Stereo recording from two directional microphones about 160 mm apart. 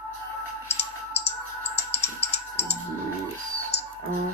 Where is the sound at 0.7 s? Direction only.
40° left (ahead or behind).